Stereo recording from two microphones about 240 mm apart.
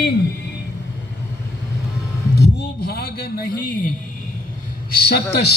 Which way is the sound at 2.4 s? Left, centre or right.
Left.